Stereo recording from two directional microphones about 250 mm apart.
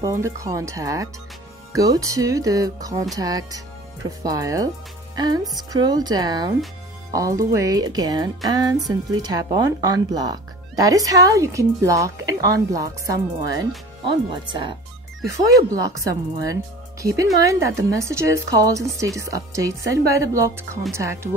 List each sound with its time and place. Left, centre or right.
0.0 s speech: centre
5.1 s music: centre
5.6 s speech: centre